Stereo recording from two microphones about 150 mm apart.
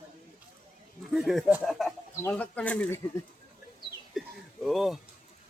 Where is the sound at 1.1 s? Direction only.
Centre (ahead or behind).